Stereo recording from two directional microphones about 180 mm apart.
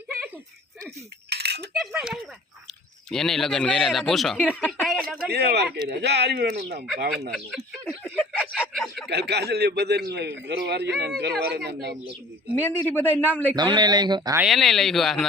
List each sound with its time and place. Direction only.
1.3 s cutlery: 65° right (ahead or behind)
1.9 s speech: 5° right (ahead or behind)
4.8 s a sound: centre (ahead or behind)
5.3 s speech: 65° right (ahead or behind)
7.3 s snicker: centre (ahead or behind)
9.0 s speech: 65° right (ahead or behind)
12.5 s a man's voice: 10° left (ahead or behind)
13.6 s speech: 25° right (ahead or behind)
14.4 s speech: centre (ahead or behind)